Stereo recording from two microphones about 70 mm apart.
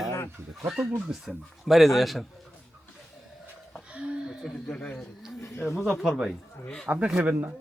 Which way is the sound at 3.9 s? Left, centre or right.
Centre.